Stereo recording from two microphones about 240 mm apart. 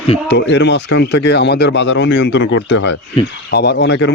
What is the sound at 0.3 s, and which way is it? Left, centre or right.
Speech, left.